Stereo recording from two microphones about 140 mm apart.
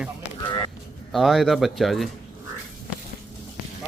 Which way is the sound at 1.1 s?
5° right (ahead or behind).